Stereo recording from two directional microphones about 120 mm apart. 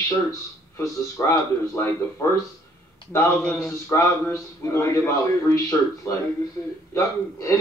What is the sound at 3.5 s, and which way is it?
Speech, 5° left (ahead or behind).